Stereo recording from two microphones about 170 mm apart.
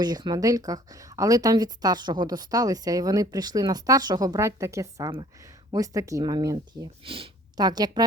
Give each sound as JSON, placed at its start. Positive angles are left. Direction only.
{"t": 0.0, "sound": "speech", "side_deg": -25}